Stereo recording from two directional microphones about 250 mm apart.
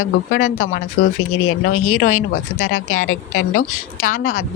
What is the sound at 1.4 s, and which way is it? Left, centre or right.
Speech, left.